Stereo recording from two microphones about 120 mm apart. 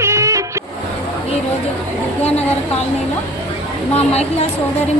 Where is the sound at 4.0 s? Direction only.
60° left (ahead or behind).